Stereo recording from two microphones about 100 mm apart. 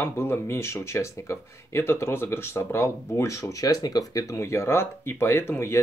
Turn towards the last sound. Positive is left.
turn(degrees=25)  # may be behind; listen again after turning